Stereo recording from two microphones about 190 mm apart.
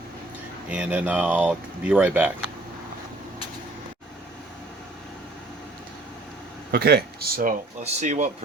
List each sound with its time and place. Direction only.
0.7 s speech: 5° right (ahead or behind)
6.7 s speech: 60° right (ahead or behind)
7.8 s speech: 40° right (ahead or behind)